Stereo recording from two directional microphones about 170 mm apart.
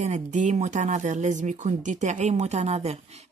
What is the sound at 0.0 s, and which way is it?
Speech, 45° right (ahead or behind).